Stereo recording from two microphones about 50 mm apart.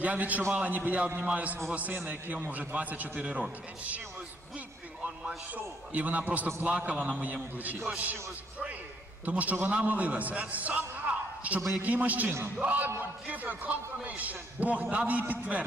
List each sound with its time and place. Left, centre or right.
0.0 s a man's voice: right
5.5 s a man's voice: right